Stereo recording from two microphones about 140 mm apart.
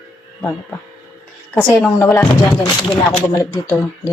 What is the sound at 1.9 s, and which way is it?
Music, 20° left (ahead or behind).